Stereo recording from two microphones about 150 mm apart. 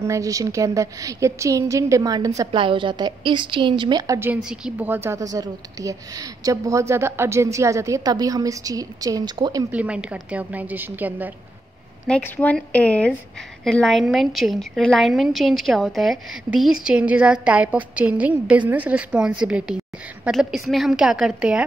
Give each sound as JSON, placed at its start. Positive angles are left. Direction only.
{"t": 0.0, "sound": "a woman's voice", "side_deg": -20}
{"t": 4.2, "sound": "a woman's voice", "side_deg": -10}
{"t": 9.7, "sound": "a woman's voice", "side_deg": -10}
{"t": 12.1, "sound": "a woman's voice", "side_deg": 10}